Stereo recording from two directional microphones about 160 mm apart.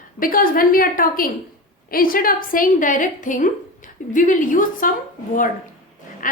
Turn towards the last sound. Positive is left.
turn(degrees=55)  # may be behind; listen again after turning